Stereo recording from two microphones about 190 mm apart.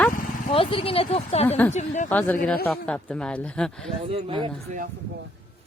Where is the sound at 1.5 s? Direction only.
10° left (ahead or behind).